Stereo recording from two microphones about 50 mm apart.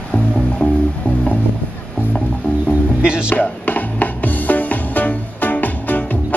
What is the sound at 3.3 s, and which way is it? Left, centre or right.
Music, left.